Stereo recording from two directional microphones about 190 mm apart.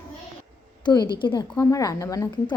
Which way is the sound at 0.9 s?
20° left (ahead or behind).